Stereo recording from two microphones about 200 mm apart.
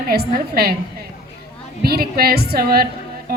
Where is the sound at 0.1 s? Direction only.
50° right (ahead or behind).